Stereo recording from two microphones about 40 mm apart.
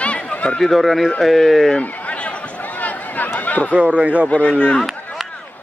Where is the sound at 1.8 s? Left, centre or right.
Left.